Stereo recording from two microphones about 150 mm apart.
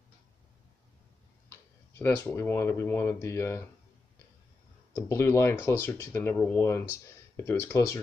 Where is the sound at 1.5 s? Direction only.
15° left (ahead or behind).